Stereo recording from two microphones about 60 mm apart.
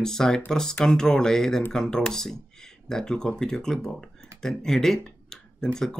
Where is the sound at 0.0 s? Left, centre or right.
Centre.